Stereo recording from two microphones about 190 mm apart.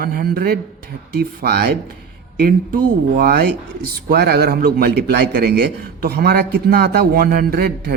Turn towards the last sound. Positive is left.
turn(degrees=-55)  # may be behind; listen again after turning